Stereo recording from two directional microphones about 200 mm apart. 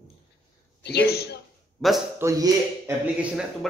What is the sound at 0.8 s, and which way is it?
Speech, 55° left (ahead or behind).